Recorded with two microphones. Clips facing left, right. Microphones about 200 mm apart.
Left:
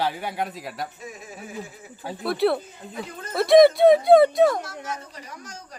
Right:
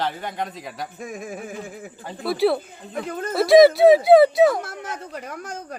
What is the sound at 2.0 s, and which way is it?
Speech, 5° left (ahead or behind).